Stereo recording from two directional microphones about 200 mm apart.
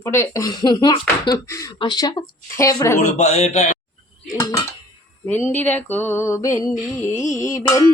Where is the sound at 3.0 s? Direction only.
35° left (ahead or behind).